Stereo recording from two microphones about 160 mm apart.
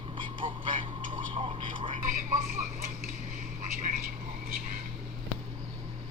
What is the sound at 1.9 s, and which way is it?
Speech, 55° right (ahead or behind).